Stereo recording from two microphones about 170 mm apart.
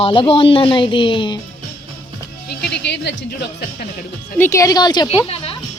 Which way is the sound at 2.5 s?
75° left (ahead or behind).